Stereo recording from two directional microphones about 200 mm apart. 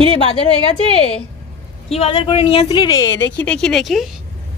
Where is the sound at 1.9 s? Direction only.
30° left (ahead or behind); by 4.1 s centre (ahead or behind).